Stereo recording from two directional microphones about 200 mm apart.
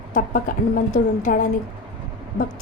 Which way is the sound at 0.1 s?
40° left (ahead or behind).